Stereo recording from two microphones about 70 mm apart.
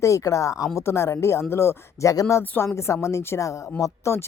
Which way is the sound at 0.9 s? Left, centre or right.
Left.